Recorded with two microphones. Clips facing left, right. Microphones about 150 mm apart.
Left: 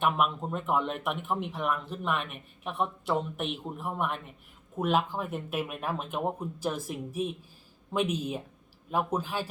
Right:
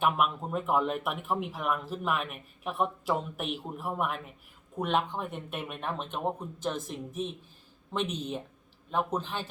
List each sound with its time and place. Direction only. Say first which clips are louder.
0.0 s speech: even; centre (ahead or behind)